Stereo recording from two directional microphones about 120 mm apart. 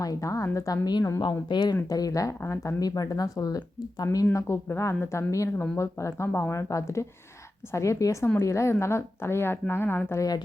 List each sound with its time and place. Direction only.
0.0 s a woman's voice: 30° left (ahead or behind)